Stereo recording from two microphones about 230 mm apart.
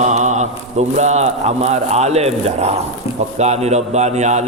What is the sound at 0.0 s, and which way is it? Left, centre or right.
A man's voice, right.